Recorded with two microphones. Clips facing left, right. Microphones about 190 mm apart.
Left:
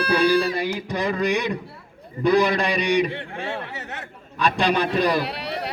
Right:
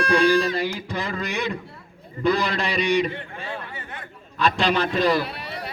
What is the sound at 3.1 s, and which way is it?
Speech, 70° left (ahead or behind).